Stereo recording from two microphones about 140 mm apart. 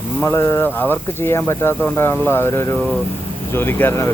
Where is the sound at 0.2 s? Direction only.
15° left (ahead or behind).